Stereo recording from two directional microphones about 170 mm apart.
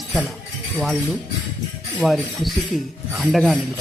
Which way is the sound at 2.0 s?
Centre (ahead or behind).